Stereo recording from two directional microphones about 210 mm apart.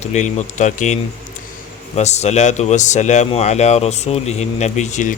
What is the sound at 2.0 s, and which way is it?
Speech, 30° left (ahead or behind).